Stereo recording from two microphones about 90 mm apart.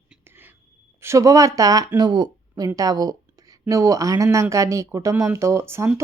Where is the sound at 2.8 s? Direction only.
45° right (ahead or behind).